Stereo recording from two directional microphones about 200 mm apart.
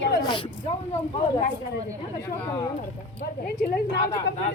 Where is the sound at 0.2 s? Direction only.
20° left (ahead or behind).